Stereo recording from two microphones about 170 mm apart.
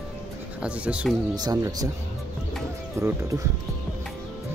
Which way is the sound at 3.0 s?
15° right (ahead or behind).